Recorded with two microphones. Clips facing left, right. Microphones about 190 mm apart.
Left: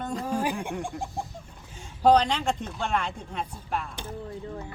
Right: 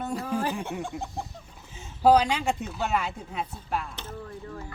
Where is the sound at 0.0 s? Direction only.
10° right (ahead or behind).